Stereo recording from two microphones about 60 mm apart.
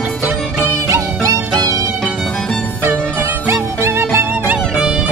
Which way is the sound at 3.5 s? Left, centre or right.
Right.